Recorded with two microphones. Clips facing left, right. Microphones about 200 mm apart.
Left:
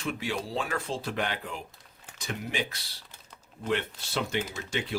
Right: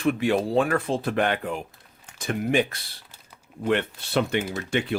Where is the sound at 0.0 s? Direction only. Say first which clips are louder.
Right 10 dB; 55° right (ahead or behind).